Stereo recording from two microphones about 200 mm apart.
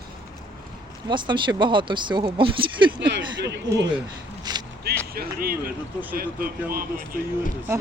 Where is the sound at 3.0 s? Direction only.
60° right (ahead or behind).